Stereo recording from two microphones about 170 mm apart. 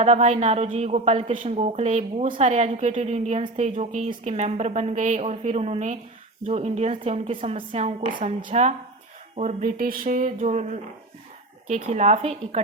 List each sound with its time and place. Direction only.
0.0 s a woman's voice: 40° right (ahead or behind)